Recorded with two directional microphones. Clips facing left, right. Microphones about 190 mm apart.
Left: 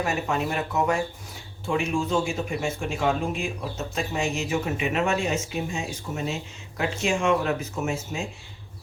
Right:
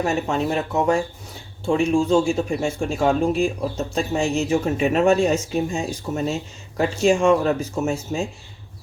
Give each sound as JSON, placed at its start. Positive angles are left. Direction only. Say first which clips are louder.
{"t": 0.0, "sound": "speech", "louder": "right 4 dB", "side_deg": -30}